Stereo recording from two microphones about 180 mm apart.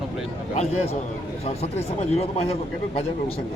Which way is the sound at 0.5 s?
35° left (ahead or behind).